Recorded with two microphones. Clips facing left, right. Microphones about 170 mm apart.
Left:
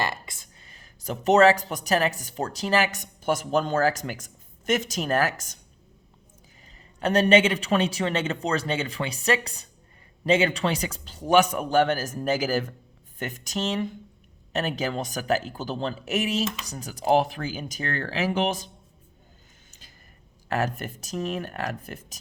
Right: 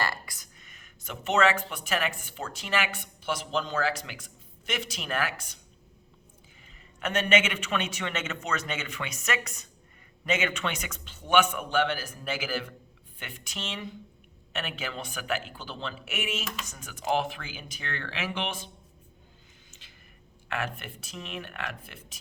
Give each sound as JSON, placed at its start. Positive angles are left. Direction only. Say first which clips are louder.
{"t": 0.0, "sound": "speech", "louder": "left 3 dB", "side_deg": 20}
{"t": 7.0, "sound": "speech", "louder": "left 7 dB", "side_deg": 35}
{"t": 20.5, "sound": "speech", "louder": "left 7 dB", "side_deg": 40}